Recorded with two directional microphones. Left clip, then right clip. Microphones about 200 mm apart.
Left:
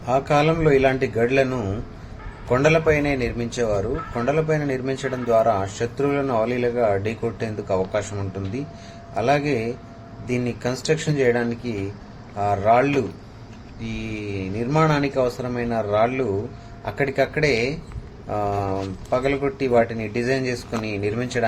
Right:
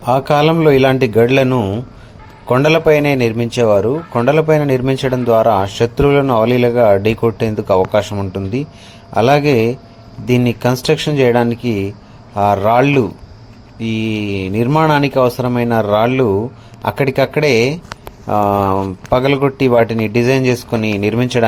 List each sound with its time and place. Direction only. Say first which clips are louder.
0.0 s speech: right 7 dB; 45° right (ahead or behind)